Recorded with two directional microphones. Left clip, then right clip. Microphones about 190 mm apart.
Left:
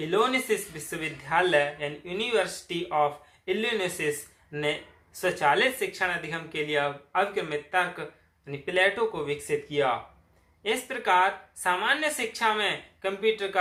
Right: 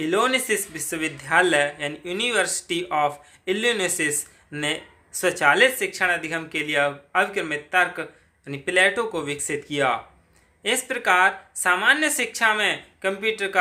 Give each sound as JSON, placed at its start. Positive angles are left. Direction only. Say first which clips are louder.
{"t": 0.0, "sound": "a man's voice", "louder": "right 4 dB", "side_deg": -45}